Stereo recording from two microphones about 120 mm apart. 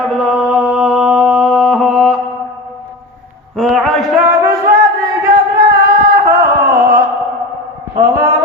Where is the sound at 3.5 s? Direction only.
Centre (ahead or behind).